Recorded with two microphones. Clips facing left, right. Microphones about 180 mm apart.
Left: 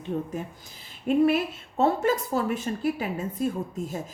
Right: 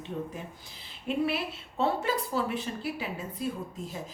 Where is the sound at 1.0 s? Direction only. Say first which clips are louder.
Left 8 dB; 45° left (ahead or behind).